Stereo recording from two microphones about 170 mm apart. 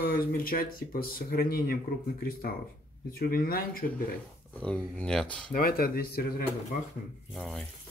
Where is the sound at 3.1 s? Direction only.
60° left (ahead or behind).